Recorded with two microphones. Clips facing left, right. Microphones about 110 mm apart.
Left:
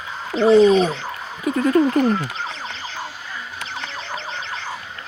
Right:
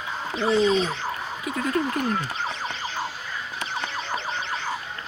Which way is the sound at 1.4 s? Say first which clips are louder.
Left 9 dB; 45° left (ahead or behind).